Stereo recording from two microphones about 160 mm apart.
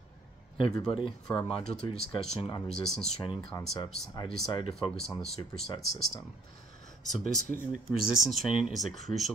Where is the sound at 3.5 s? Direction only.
25° left (ahead or behind).